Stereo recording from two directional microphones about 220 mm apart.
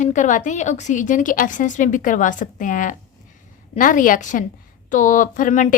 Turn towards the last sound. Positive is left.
turn(degrees=35)  # may be behind; listen again after turning